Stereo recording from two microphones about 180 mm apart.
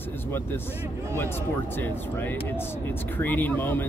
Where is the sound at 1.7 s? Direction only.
10° left (ahead or behind).